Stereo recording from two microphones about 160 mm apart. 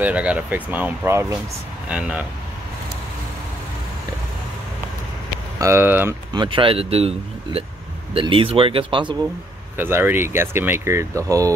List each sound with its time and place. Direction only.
0.0 s speech: 10° right (ahead or behind)
5.6 s speech: 15° right (ahead or behind)
6.3 s speech: 30° right (ahead or behind)
9.8 s speech: 15° right (ahead or behind)